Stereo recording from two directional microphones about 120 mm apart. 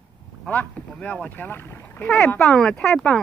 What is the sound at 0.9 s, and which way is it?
Speech, 10° left (ahead or behind).